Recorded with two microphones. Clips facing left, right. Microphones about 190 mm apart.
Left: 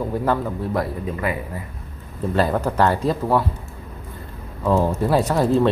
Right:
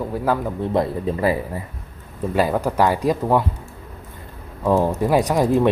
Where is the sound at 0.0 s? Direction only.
5° right (ahead or behind).